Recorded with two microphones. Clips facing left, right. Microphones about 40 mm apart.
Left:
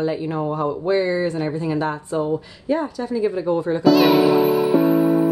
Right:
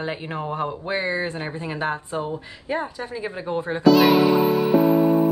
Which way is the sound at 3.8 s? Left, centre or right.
Centre.